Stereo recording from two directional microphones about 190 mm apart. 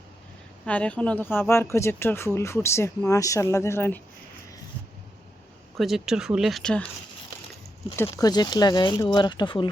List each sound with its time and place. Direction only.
0.6 s speech: 5° left (ahead or behind)
5.7 s speech: centre (ahead or behind)
7.9 s speech: 15° left (ahead or behind)